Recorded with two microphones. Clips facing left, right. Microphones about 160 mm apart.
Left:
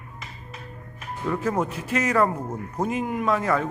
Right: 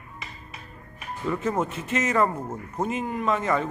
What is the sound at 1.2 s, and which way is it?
Speech, centre (ahead or behind).